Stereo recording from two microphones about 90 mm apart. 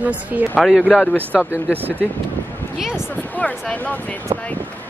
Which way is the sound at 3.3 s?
15° left (ahead or behind).